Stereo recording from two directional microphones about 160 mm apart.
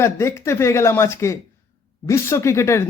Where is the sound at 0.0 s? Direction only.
15° left (ahead or behind).